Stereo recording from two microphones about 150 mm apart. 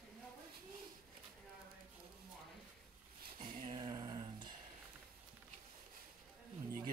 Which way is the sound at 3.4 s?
30° right (ahead or behind).